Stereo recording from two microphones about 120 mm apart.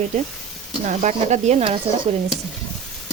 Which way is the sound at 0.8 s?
80° right.